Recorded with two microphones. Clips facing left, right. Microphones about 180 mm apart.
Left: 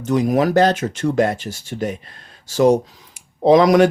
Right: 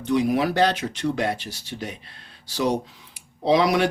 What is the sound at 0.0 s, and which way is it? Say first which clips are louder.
Speech: left 4 dB; 45° left (ahead or behind).